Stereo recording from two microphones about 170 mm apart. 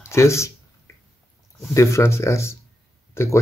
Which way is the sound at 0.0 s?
15° left (ahead or behind).